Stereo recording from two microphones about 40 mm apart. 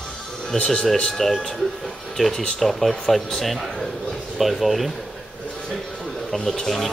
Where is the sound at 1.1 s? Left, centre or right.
Centre.